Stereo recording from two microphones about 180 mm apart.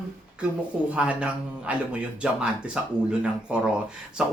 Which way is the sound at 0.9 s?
5° right (ahead or behind).